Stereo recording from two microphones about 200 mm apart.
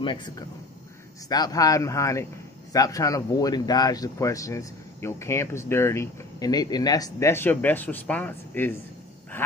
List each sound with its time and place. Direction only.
0.0 s speech: 20° left (ahead or behind)